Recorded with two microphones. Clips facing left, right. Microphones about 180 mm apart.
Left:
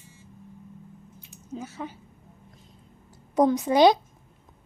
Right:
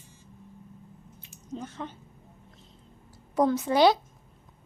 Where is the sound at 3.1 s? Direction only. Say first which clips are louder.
Left 3 dB; 20° left (ahead or behind).